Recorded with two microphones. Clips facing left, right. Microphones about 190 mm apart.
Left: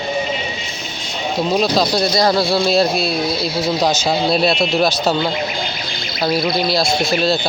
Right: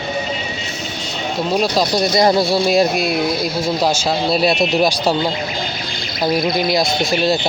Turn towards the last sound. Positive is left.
turn(degrees=-15)  # may be behind; listen again after turning